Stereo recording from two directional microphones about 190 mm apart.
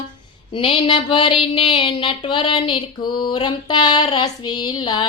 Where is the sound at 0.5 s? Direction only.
30° left (ahead or behind).